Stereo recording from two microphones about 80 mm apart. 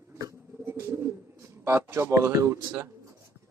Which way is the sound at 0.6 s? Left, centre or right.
Right.